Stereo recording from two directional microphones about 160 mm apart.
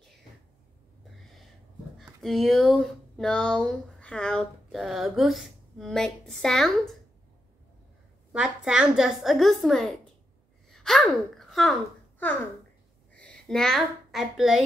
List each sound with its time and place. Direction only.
2.0 s speech: centre (ahead or behind)
8.3 s a woman's voice: 5° right (ahead or behind)
13.1 s a woman's voice: 5° left (ahead or behind)